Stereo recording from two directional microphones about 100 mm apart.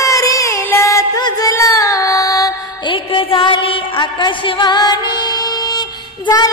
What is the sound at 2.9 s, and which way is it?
Music, 65° left (ahead or behind).